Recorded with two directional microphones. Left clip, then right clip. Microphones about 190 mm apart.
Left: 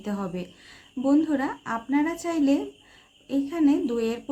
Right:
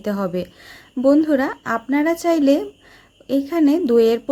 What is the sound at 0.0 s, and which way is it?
Speech, 40° right (ahead or behind).